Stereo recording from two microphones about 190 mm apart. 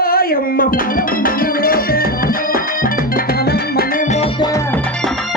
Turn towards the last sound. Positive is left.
turn(degrees=55)  # may be behind; listen again after turning